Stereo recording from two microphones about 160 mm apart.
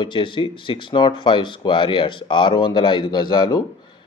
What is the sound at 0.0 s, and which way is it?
Speech, 30° left (ahead or behind).